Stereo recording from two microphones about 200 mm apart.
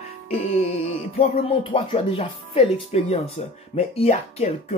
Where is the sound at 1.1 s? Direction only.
30° left (ahead or behind).